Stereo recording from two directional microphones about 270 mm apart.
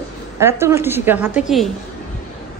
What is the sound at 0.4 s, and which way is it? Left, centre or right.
A woman's voice, centre.